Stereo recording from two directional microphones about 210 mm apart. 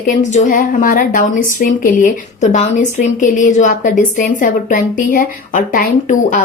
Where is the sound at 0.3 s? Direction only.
35° left (ahead or behind).